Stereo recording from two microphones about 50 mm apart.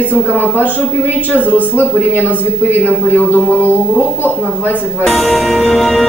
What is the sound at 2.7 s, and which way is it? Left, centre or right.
Speech, left.